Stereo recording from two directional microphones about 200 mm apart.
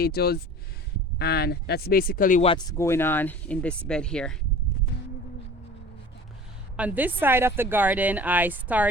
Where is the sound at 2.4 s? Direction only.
25° left (ahead or behind).